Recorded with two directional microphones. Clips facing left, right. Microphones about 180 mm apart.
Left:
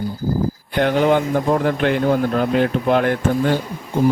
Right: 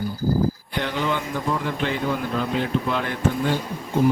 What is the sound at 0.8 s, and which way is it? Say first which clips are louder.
Speech: left 10 dB; 55° left (ahead or behind).